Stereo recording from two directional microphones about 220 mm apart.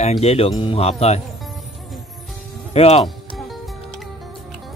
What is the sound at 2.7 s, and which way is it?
Speech, 30° left (ahead or behind).